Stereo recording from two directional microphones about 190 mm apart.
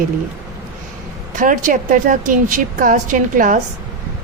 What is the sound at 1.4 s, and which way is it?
A woman's voice, 45° right (ahead or behind).